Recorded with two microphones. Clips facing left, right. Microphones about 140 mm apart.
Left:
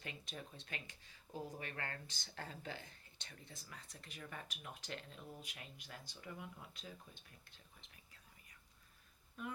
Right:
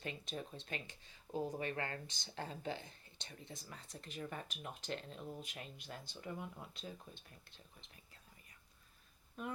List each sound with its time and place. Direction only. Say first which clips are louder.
0.0 s speech: right 6 dB; 30° right (ahead or behind)